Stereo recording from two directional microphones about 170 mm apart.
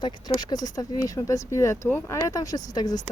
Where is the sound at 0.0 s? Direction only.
25° left (ahead or behind).